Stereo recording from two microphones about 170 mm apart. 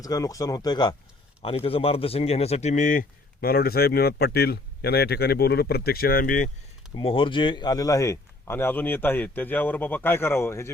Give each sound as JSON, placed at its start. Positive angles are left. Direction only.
{"t": 0.0, "sound": "speech", "side_deg": 20}
{"t": 1.4, "sound": "speech", "side_deg": 35}
{"t": 6.9, "sound": "speech", "side_deg": 30}